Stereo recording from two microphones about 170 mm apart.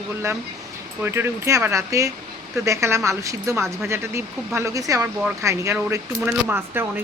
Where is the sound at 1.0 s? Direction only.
15° right (ahead or behind).